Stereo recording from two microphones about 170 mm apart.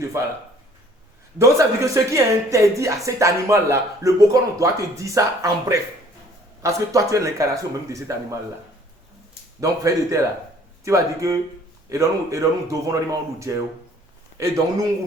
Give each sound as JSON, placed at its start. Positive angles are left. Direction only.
{"t": 0.1, "sound": "speech", "side_deg": -15}
{"t": 1.4, "sound": "speech", "side_deg": -20}
{"t": 9.6, "sound": "speech", "side_deg": -20}